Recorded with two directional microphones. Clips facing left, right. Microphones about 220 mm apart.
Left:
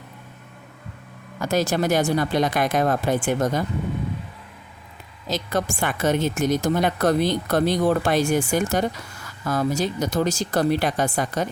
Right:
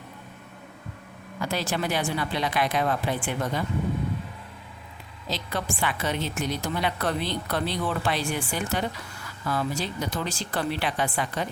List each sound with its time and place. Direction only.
1.4 s a woman's voice: 45° left (ahead or behind)
5.3 s a woman's voice: 45° left (ahead or behind)